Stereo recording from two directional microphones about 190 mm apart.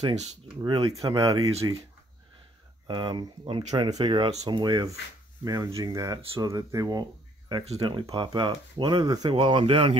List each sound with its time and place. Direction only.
0.6 s speech: 25° right (ahead or behind)
2.9 s speech: 25° right (ahead or behind)